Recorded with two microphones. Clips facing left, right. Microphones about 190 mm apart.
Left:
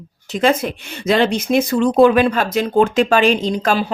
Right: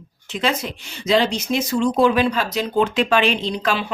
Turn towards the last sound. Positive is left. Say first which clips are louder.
# left 5 dB
turn(degrees=40)  # may be behind; listen again after turning